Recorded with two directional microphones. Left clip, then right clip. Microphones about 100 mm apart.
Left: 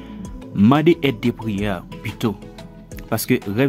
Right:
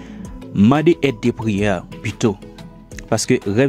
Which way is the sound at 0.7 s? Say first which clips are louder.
Right 1 dB; 40° right (ahead or behind).